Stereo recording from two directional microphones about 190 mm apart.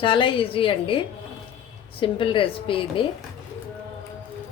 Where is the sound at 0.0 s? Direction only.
25° left (ahead or behind).